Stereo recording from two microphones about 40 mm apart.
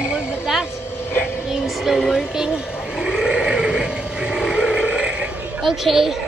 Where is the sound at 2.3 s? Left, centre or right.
Centre.